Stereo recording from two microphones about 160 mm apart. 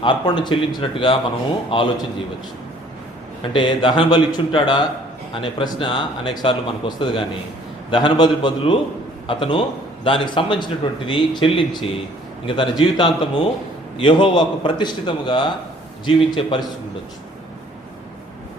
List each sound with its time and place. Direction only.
0.0 s a man's voice: 30° left (ahead or behind)
3.5 s a man's voice: 30° left (ahead or behind)